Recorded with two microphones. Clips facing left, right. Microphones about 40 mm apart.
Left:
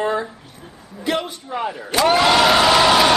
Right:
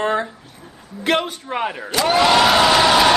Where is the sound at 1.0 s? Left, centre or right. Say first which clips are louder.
Right 3 dB; right.